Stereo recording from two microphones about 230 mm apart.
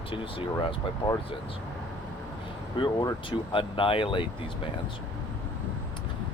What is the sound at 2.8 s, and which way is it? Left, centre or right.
Speech, centre.